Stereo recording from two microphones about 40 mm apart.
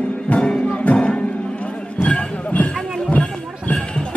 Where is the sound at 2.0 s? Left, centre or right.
Left.